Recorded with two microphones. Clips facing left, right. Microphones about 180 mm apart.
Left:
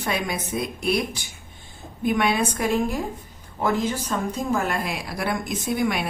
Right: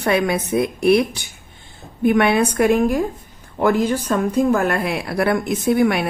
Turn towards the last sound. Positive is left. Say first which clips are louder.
# right 7 dB
turn(degrees=-60)  # may be behind; listen again after turning